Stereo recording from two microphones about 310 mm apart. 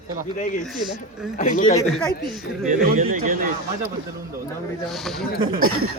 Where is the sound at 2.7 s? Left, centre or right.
Right.